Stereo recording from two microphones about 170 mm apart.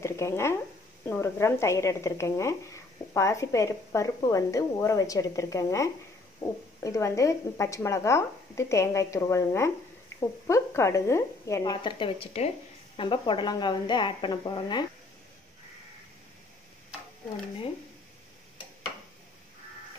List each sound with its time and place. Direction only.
0.0 s a woman's voice: 15° left (ahead or behind)